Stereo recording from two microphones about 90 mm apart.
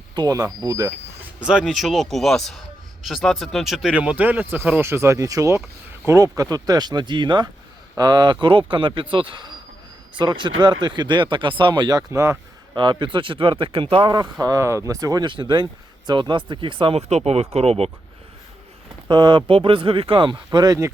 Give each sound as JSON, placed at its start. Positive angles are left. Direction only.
{"t": 0.2, "sound": "speech", "side_deg": -45}
{"t": 1.4, "sound": "a man's voice", "side_deg": -10}
{"t": 3.9, "sound": "speech", "side_deg": -15}
{"t": 12.7, "sound": "speech", "side_deg": -60}
{"t": 14.3, "sound": "speech", "side_deg": -40}
{"t": 15.2, "sound": "speech", "side_deg": -60}
{"t": 19.0, "sound": "speech", "side_deg": -60}